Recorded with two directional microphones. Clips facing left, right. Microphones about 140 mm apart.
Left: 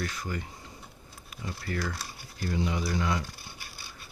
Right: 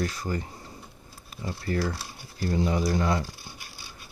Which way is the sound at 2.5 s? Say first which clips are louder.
Right 5 dB; 40° right (ahead or behind).